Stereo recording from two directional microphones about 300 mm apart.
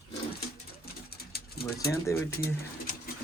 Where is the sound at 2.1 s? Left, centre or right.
Centre.